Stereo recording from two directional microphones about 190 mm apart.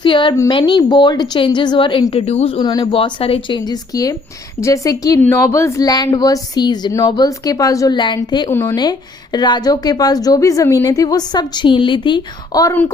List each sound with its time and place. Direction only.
0.0 s a woman's voice: 25° left (ahead or behind)